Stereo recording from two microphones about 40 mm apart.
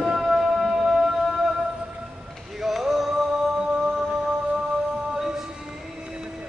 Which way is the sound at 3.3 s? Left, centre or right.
Centre.